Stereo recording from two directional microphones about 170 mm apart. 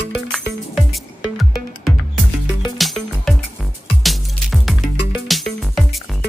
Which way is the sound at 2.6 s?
Centre (ahead or behind).